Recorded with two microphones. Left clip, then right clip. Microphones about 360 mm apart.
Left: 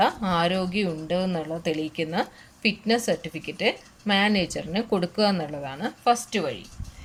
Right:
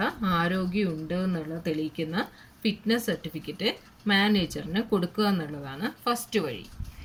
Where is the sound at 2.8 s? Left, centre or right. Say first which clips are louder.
Left 2 dB; centre.